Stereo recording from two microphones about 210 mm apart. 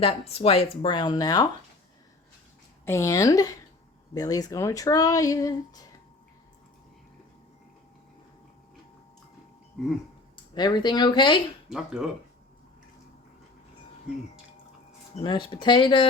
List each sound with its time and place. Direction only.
0.0 s speech: 30° left (ahead or behind)
2.8 s speech: 15° left (ahead or behind)
10.3 s speech: 20° left (ahead or behind)
11.7 s speech: 5° right (ahead or behind)
15.1 s speech: 20° left (ahead or behind)